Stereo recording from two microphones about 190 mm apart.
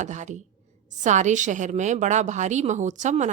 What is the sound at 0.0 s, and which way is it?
A woman's voice, 40° right (ahead or behind).